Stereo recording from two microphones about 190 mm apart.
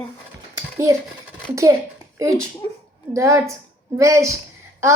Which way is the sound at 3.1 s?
15° right (ahead or behind).